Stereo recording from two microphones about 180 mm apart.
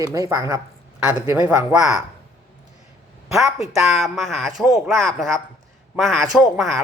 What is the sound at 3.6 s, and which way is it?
Speech, centre (ahead or behind).